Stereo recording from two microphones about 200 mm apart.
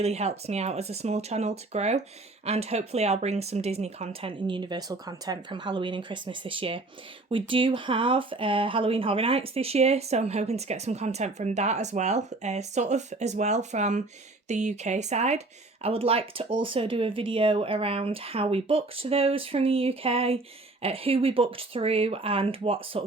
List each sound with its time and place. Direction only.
0.0 s speech: 30° right (ahead or behind)